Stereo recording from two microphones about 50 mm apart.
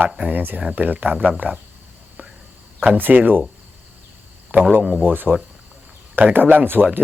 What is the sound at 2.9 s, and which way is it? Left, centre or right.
Speech, right.